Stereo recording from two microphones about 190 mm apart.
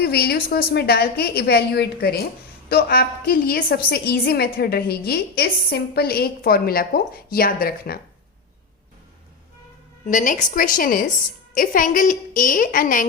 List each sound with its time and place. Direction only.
0.0 s a woman's voice: 55° left (ahead or behind)
10.1 s a woman's voice: 45° left (ahead or behind)